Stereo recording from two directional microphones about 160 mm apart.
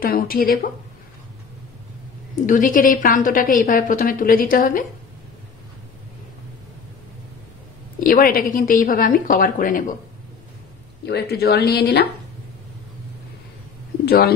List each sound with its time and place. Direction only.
0.0 s a woman's voice: 65° left (ahead or behind)
2.3 s a woman's voice: 55° left (ahead or behind)
8.0 s a woman's voice: 60° left (ahead or behind)
11.1 s speech: 85° left
14.0 s speech: 75° left (ahead or behind)